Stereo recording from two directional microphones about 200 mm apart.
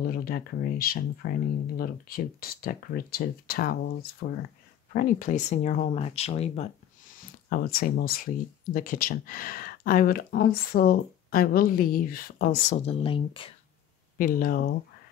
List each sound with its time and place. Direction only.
0.0 s speech: 45° left (ahead or behind); by 6.7 s 30° left (ahead or behind)
7.2 s speech: 45° left (ahead or behind)
12.7 s speech: 30° left (ahead or behind)
14.1 s speech: 45° left (ahead or behind)